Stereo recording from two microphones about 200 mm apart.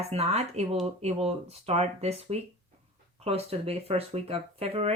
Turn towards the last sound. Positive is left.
turn(degrees=-30)  # may be behind; listen again after turning